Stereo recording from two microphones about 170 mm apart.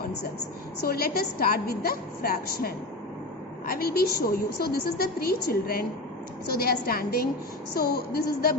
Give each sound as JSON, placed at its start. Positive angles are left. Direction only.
{"t": 0.8, "sound": "a woman's voice", "side_deg": 60}